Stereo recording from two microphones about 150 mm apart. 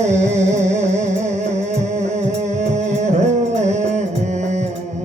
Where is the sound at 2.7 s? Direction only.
50° right (ahead or behind).